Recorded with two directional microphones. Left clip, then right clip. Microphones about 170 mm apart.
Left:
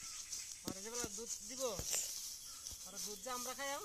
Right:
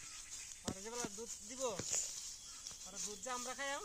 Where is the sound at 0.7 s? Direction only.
Centre (ahead or behind).